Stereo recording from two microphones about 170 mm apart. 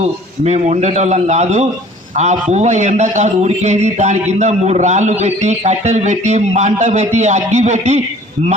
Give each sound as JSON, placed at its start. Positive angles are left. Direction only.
{"t": 0.0, "sound": "a man's voice", "side_deg": -40}